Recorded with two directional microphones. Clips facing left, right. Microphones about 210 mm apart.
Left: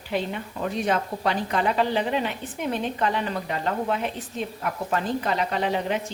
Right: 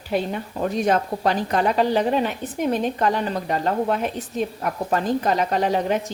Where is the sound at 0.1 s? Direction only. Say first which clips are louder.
Right 4 dB; 40° right (ahead or behind).